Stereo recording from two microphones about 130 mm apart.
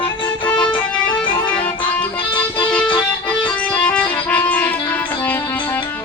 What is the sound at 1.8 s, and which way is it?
Music, 40° left (ahead or behind).